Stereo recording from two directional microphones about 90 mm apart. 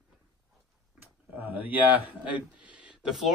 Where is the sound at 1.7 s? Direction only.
20° right (ahead or behind).